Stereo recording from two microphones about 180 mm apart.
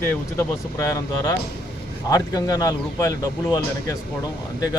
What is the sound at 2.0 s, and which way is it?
A man's voice, 20° left (ahead or behind).